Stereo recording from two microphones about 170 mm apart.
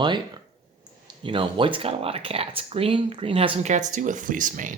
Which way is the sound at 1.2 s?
30° right (ahead or behind).